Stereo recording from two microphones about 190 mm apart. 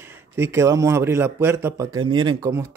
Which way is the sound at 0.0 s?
10° right (ahead or behind).